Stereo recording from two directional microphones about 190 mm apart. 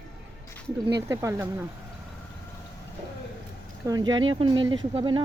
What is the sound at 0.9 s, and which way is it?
Speech, 15° right (ahead or behind).